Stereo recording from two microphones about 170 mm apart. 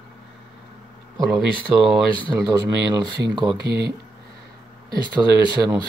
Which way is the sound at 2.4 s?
25° right (ahead or behind).